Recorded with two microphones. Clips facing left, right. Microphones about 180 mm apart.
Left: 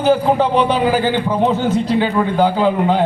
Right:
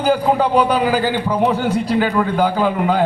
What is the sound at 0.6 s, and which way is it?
A man's voice, 25° left (ahead or behind).